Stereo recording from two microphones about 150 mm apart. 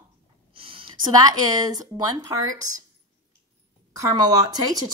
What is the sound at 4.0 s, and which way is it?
Speech, 25° right (ahead or behind).